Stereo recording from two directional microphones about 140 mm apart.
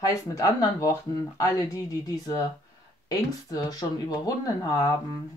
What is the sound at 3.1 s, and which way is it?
Speech, 25° left (ahead or behind).